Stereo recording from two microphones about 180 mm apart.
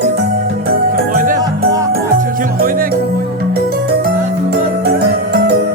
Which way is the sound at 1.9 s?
50° right (ahead or behind).